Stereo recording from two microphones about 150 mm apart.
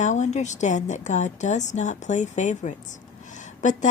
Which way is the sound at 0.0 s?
50° left (ahead or behind).